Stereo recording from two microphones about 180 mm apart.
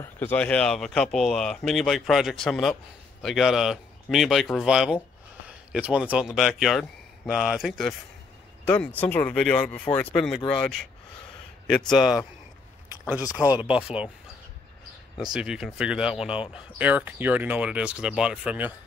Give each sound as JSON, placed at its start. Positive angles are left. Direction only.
{"t": 0.0, "sound": "speech", "side_deg": 10}
{"t": 11.9, "sound": "speech", "side_deg": 0}
{"t": 13.0, "sound": "speech", "side_deg": 20}
{"t": 13.6, "sound": "speech", "side_deg": -5}
{"t": 15.3, "sound": "speech", "side_deg": -5}